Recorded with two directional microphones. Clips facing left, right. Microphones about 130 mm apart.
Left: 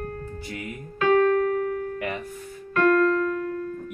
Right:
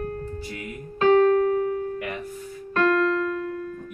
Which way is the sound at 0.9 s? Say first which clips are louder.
Right 2 dB; 30° right (ahead or behind).